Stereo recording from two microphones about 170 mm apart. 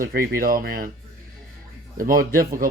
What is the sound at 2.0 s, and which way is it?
Speech, 55° right (ahead or behind).